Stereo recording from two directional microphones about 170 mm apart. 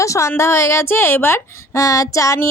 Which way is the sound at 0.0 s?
15° left (ahead or behind).